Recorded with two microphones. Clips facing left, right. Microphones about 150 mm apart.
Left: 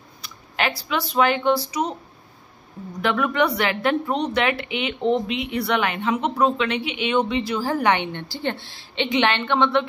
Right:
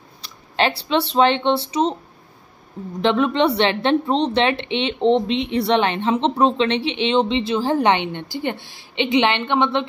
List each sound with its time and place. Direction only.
0.2 s speech: 30° right (ahead or behind)
3.0 s a woman's voice: 25° right (ahead or behind)